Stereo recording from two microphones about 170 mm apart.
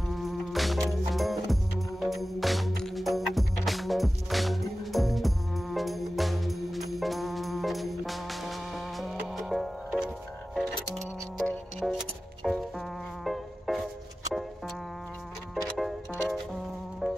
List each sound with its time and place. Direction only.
0.1 s insect: centre (ahead or behind)
11.3 s music: centre (ahead or behind)
15.5 s music: centre (ahead or behind)
17.0 s music: centre (ahead or behind)